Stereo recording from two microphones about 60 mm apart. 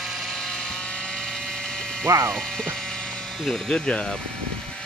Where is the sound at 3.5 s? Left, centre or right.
Centre.